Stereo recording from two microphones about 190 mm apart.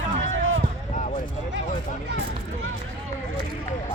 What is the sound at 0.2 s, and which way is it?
Run, 90° right.